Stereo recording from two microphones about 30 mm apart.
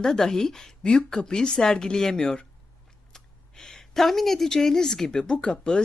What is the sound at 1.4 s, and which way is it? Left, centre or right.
Speech, left.